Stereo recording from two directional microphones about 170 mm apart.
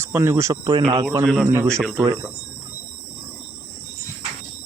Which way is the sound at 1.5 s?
15° right (ahead or behind).